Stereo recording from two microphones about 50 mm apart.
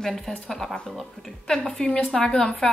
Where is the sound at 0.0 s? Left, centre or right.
Centre.